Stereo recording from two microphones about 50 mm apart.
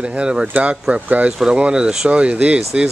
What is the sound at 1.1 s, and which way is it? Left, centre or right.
Speech, right.